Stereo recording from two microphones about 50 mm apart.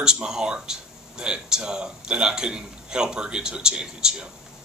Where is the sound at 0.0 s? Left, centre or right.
Centre.